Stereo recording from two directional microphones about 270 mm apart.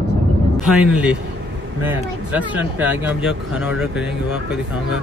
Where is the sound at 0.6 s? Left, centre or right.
Centre.